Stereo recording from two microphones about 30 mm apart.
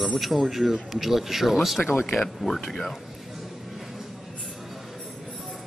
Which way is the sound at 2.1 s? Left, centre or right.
Centre.